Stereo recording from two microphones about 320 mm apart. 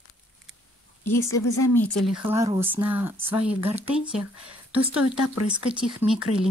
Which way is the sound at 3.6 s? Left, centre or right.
Centre.